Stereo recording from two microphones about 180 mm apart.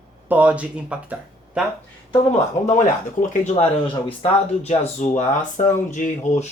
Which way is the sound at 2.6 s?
45° left (ahead or behind).